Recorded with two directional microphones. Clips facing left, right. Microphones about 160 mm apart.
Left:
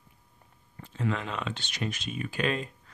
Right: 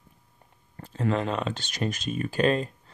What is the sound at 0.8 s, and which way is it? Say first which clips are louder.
Speech: right 5 dB; 40° right (ahead or behind).